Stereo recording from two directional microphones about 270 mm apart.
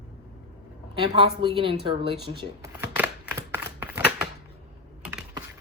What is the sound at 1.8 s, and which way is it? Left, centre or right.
Shuffling cards, centre.